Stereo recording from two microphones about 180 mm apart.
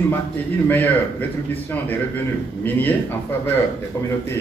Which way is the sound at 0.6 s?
10° left (ahead or behind).